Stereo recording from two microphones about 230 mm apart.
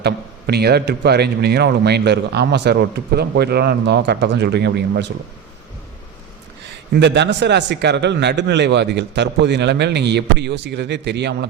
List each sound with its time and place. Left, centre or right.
0.0 s a man's voice: right
6.9 s a man's voice: right